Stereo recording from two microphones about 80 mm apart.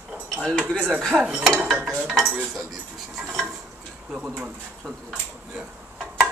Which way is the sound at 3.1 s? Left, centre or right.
Centre.